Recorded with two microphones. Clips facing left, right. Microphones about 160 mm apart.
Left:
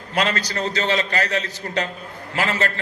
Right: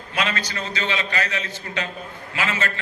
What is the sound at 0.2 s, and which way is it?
A man's voice, 40° left (ahead or behind).